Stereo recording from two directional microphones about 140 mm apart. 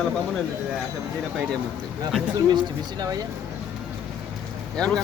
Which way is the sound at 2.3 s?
30° right (ahead or behind).